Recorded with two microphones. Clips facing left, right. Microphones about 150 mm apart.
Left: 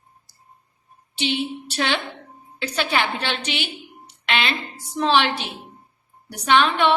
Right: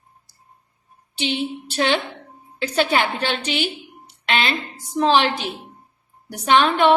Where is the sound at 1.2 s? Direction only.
45° right (ahead or behind).